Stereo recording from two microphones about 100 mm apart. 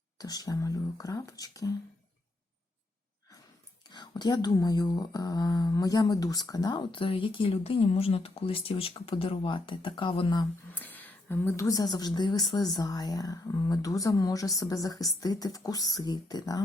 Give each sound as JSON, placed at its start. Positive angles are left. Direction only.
{"t": 0.2, "sound": "speech", "side_deg": 40}
{"t": 3.8, "sound": "speech", "side_deg": 45}
{"t": 10.7, "sound": "a sound", "side_deg": 20}
{"t": 11.5, "sound": "speech", "side_deg": 35}